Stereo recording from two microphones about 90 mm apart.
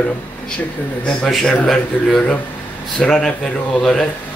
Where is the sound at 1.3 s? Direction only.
5° left (ahead or behind).